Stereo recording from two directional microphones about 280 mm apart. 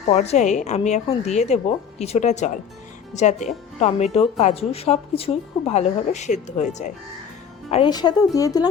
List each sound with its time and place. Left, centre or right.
0.1 s speech: left